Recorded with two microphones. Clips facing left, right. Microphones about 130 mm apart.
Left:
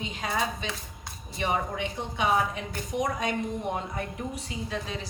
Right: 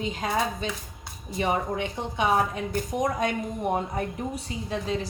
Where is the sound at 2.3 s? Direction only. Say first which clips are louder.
Right 3 dB; 40° right (ahead or behind).